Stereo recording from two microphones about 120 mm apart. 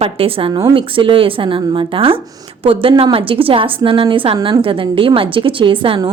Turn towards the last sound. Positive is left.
turn(degrees=-45)  # may be behind; listen again after turning